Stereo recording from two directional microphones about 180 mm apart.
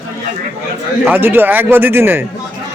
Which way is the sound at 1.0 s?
10° right (ahead or behind).